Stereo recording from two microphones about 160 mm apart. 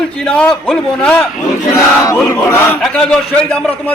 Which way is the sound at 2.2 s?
10° left (ahead or behind).